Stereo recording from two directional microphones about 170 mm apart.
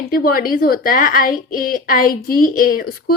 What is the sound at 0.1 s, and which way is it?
A woman's voice, 60° left (ahead or behind).